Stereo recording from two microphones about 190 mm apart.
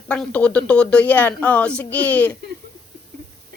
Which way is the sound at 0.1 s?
5° left (ahead or behind).